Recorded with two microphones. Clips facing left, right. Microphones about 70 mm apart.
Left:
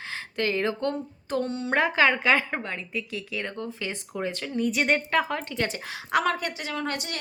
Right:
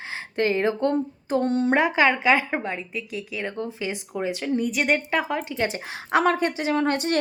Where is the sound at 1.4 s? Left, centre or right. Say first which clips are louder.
Right 9 dB; right.